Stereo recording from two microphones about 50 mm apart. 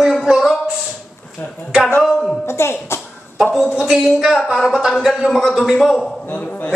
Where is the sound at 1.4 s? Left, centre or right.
Left.